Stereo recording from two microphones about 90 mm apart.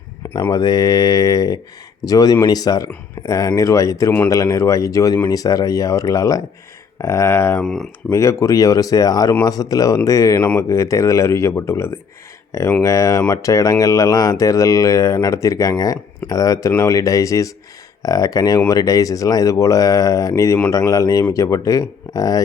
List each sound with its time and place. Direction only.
0.5 s mantra: 50° left (ahead or behind)
2.0 s speech: 45° left (ahead or behind)
7.6 s speech: 5° left (ahead or behind)
8.1 s speech: 35° left (ahead or behind)